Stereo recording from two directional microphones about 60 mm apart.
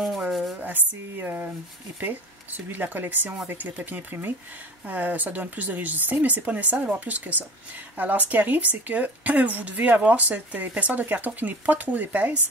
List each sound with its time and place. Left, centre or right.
0.3 s rub: centre
0.6 s a woman's voice: right